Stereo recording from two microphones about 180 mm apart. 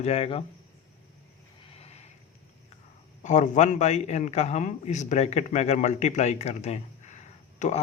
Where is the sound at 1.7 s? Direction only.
35° left (ahead or behind).